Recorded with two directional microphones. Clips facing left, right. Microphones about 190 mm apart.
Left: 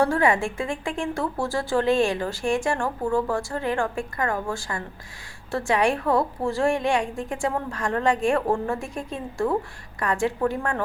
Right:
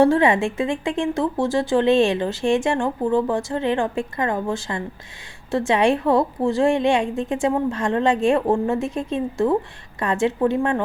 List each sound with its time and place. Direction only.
0.0 s a woman's voice: 20° right (ahead or behind)